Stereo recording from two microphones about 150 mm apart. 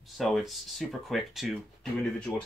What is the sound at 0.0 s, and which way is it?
Speech, centre (ahead or behind).